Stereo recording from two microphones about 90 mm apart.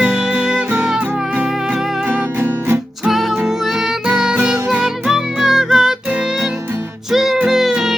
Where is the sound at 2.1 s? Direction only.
25° right (ahead or behind).